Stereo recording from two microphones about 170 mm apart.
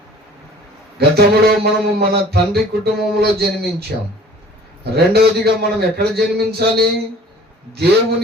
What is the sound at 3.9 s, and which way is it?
A man's voice, 70° right (ahead or behind).